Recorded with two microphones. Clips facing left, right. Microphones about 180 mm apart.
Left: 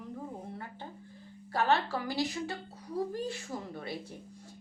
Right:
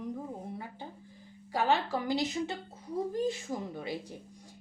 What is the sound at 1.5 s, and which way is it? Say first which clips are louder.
A child's voice: even; 15° right (ahead or behind).